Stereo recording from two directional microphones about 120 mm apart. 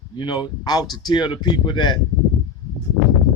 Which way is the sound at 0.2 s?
40° left (ahead or behind).